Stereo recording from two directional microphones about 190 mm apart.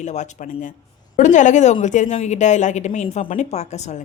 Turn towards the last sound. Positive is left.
turn(degrees=35)  # may be behind; listen again after turning